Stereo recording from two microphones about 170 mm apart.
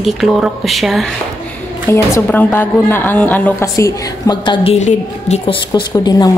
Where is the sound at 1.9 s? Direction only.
15° left (ahead or behind); by 5.5 s 40° left (ahead or behind).